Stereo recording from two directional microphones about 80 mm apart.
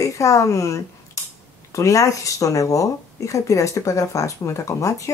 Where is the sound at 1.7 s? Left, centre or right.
Left.